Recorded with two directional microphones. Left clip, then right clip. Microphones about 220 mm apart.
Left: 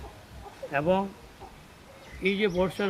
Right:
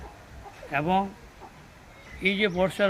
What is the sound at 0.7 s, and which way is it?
Speech, 50° right (ahead or behind).